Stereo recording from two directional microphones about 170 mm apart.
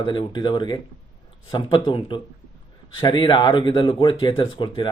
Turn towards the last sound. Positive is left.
turn(degrees=25)  # may be behind; listen again after turning